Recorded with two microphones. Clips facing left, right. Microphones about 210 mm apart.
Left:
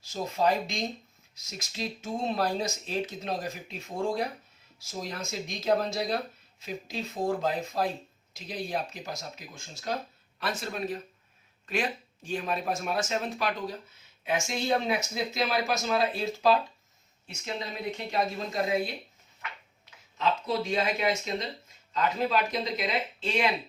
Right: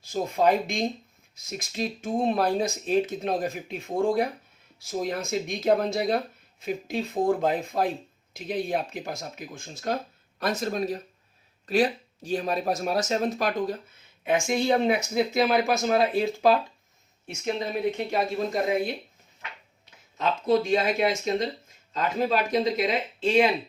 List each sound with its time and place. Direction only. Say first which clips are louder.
0.0 s speech: right 4 dB; 55° right (ahead or behind)
10.4 s speech: right 6 dB; 40° right (ahead or behind)
17.9 s speech: right 4 dB; 50° right (ahead or behind)
20.1 s speech: right 5 dB; 50° right (ahead or behind)